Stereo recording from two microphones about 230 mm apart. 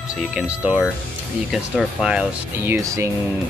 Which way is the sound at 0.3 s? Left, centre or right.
Centre.